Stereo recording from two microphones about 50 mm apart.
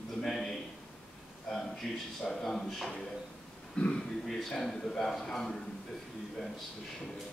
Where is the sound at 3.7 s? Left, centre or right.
Centre.